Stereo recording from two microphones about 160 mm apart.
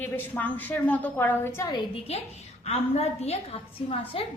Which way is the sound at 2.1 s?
40° left (ahead or behind).